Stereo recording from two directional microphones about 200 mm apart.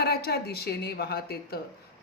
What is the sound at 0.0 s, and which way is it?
Speech, 55° left (ahead or behind).